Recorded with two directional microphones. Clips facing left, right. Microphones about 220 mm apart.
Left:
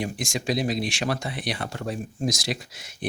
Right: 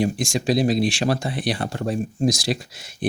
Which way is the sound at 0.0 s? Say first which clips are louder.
Right 7 dB; 30° right (ahead or behind).